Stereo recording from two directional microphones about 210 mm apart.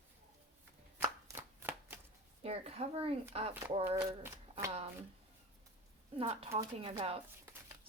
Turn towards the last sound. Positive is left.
turn(degrees=-25)  # may be behind; listen again after turning